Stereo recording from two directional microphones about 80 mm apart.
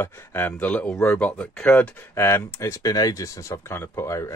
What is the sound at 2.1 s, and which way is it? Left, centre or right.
Speech, left.